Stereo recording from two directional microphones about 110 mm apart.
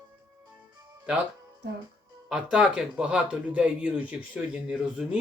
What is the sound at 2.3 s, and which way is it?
Speech, 5° right (ahead or behind).